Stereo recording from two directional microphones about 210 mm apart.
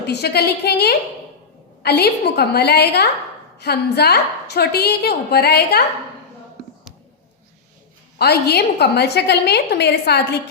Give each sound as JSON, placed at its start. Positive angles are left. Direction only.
{"t": 0.1, "sound": "a woman's voice", "side_deg": 50}
{"t": 8.2, "sound": "a woman's voice", "side_deg": 50}